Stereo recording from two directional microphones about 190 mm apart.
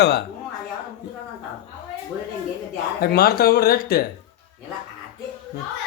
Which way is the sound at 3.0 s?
55° left (ahead or behind).